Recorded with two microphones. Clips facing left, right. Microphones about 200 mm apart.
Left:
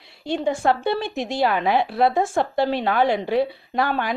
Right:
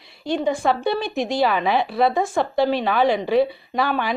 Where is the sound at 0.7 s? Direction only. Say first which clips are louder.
Even; 25° left (ahead or behind).